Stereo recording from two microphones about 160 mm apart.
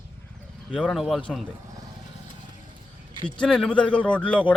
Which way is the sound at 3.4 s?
5° left (ahead or behind).